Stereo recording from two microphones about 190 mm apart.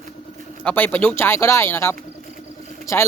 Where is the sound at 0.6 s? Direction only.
10° left (ahead or behind).